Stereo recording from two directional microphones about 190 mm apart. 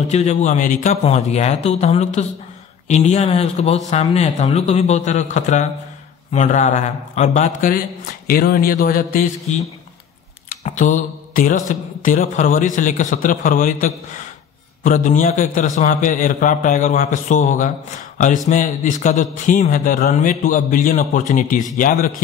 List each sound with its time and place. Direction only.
0.1 s speech: 35° left (ahead or behind)
8.3 s mantra: 50° left (ahead or behind)
10.5 s mantra: 40° left (ahead or behind)
18.1 s a sound: 40° left (ahead or behind)
18.5 s mantra: 40° left (ahead or behind)